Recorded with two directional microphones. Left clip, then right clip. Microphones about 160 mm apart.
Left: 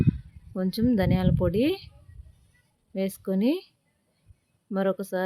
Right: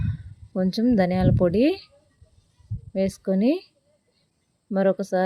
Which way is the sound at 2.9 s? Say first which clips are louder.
Right 5 dB; 15° right (ahead or behind).